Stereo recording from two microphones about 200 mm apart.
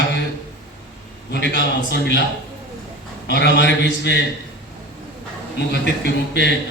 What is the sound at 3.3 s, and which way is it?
Speech, 55° left (ahead or behind).